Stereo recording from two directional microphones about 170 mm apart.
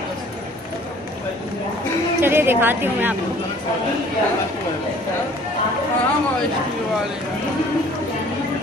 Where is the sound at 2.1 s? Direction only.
15° right (ahead or behind).